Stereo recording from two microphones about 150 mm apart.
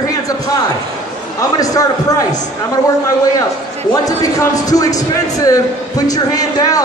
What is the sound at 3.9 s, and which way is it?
Speech, 25° left (ahead or behind).